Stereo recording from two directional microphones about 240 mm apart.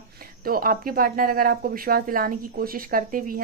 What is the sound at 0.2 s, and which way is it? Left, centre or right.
Speech, right.